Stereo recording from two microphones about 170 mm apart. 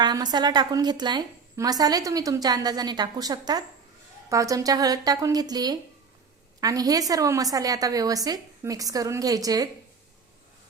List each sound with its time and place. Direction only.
0.0 s a woman's voice: 25° right (ahead or behind)